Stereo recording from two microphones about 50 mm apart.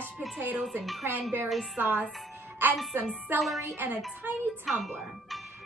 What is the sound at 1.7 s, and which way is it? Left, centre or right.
Speech, right.